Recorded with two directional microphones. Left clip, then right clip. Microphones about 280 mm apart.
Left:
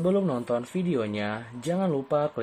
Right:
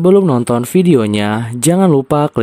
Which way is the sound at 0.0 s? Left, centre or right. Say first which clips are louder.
Right 15 dB; right.